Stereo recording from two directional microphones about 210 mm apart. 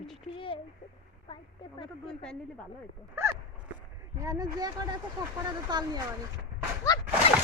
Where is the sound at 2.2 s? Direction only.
5° left (ahead or behind).